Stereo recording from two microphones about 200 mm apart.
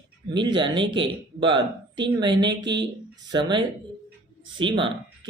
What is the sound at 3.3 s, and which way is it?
Speech, 25° right (ahead or behind).